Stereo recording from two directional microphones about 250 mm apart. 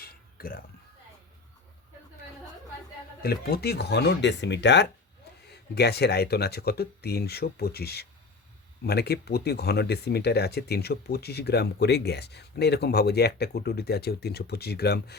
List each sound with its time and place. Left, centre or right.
0.0 s music: left
3.2 s speech: left